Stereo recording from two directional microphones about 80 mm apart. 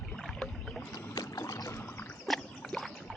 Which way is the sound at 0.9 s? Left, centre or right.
Left.